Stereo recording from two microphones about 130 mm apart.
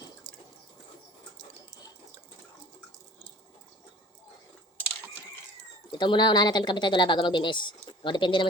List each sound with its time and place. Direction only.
6.0 s speech: 35° left (ahead or behind)